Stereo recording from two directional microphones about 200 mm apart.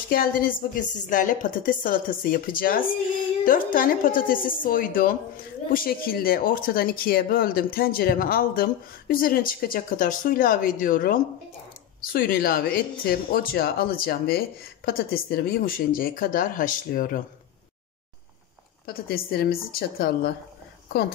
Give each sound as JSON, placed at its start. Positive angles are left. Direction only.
{"t": 0.1, "sound": "speech", "side_deg": 45}
{"t": 19.0, "sound": "speech", "side_deg": 50}